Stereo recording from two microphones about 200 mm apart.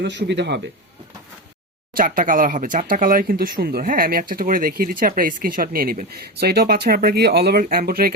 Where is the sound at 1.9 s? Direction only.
45° right (ahead or behind).